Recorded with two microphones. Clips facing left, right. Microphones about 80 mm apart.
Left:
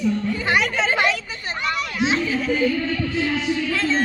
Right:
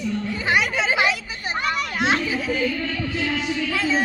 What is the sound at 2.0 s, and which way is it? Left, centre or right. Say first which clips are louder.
Children playing: even; right.